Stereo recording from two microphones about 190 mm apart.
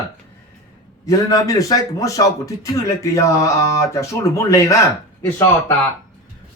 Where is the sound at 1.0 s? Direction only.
15° left (ahead or behind).